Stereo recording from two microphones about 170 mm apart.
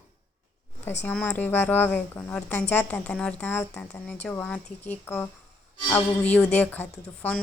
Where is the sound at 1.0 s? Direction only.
10° left (ahead or behind).